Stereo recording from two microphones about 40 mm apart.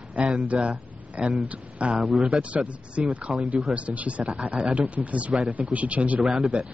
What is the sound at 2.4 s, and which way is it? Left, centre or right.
Speech, right.